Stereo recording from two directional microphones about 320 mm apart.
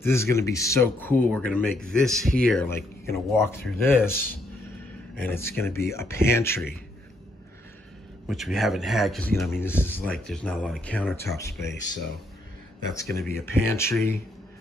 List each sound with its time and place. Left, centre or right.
0.0 s a man's voice: centre
4.1 s speech: left
5.1 s speech: centre
8.3 s a man's voice: centre
13.0 s a man's voice: centre